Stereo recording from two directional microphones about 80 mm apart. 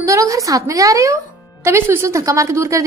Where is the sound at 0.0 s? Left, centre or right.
Right.